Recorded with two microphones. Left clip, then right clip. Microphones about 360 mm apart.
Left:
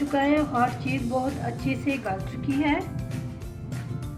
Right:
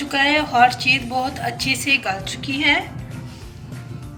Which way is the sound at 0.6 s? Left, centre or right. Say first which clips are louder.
Right 11 dB; right.